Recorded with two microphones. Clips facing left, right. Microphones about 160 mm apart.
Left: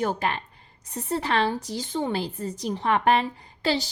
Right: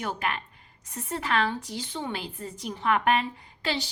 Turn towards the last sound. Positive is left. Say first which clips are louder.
# left 5 dB
turn(degrees=40)  # may be behind; listen again after turning